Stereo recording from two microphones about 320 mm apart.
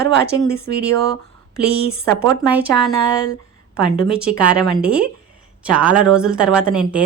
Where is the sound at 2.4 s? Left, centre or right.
Centre.